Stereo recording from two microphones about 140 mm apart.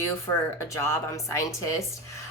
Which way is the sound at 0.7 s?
20° left (ahead or behind).